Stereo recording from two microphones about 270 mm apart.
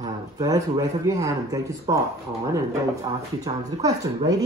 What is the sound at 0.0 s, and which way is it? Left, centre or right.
Speech, centre.